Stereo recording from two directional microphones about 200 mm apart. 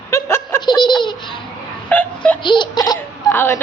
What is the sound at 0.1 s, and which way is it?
Laughter, 15° left (ahead or behind).